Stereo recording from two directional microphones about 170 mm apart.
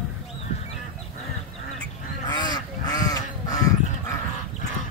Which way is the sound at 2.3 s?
25° left (ahead or behind).